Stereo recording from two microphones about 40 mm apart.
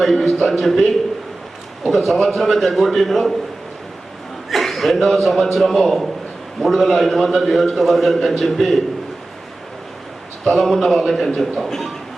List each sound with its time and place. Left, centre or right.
0.0 s a man's voice: centre
1.9 s a man's voice: centre
4.4 s a man's voice: centre
10.6 s a man's voice: centre